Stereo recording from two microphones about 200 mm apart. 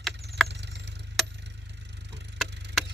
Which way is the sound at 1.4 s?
60° right (ahead or behind).